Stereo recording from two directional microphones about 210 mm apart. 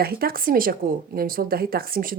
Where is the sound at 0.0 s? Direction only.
45° right (ahead or behind).